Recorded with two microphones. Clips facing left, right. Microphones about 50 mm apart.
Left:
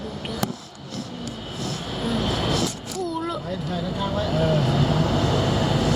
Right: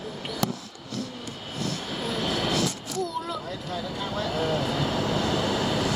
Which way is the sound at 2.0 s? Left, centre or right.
Centre.